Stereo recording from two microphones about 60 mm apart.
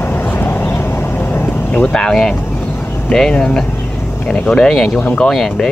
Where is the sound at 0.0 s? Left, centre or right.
Left.